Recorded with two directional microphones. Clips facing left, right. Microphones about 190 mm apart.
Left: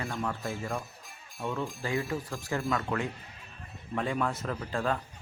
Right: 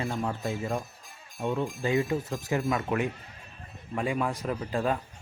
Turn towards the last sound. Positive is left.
turn(degrees=-15)  # may be behind; listen again after turning